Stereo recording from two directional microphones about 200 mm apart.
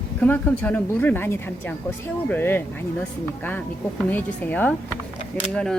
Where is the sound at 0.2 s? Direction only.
10° left (ahead or behind).